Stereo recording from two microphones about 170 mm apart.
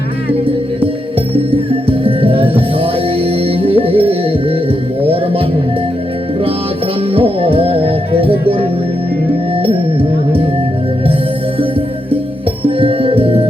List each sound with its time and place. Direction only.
1.3 s music: 35° right (ahead or behind)
7.1 s music: 35° right (ahead or behind)
9.6 s music: 30° right (ahead or behind)
12.6 s music: 35° right (ahead or behind)